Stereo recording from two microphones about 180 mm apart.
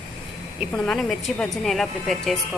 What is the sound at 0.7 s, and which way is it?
A woman's voice, 5° left (ahead or behind).